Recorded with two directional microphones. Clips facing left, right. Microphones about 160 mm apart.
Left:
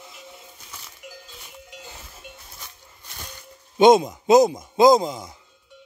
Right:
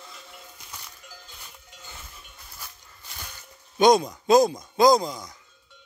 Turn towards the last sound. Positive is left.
turn(degrees=25)  # may be behind; listen again after turning